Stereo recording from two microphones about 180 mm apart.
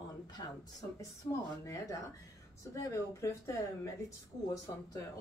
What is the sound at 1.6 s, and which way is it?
Speech, 15° left (ahead or behind).